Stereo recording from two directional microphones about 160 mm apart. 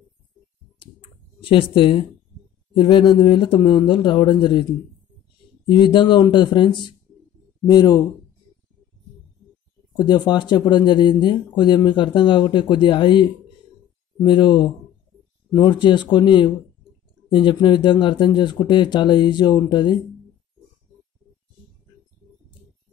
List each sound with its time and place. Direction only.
1.4 s speech: 35° left (ahead or behind)
5.7 s speech: 30° left (ahead or behind)
9.9 s speech: 25° left (ahead or behind)